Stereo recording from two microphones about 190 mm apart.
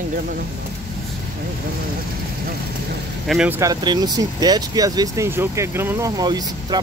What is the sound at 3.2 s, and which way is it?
Speech, 5° right (ahead or behind).